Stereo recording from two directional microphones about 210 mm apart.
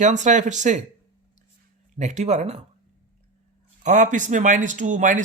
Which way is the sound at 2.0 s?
35° right (ahead or behind).